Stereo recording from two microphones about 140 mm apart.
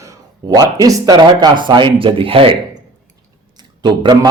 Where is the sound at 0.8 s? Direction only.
25° right (ahead or behind).